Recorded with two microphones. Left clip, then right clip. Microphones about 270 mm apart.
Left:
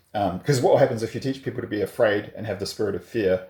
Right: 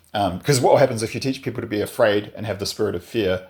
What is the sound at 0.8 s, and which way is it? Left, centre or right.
Speech, centre.